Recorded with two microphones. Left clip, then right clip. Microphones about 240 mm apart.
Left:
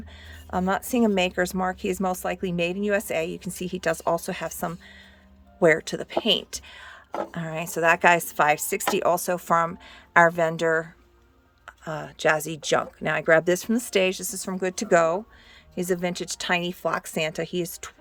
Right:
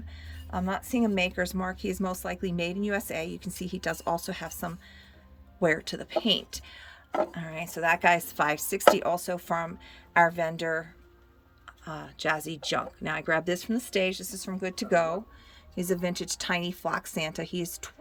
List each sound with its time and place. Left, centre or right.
0.5 s a woman's voice: left